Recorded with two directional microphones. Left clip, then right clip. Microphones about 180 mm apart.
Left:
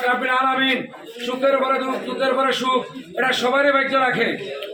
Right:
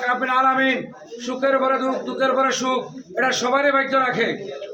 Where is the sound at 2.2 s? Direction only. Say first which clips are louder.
Even; 10° right (ahead or behind).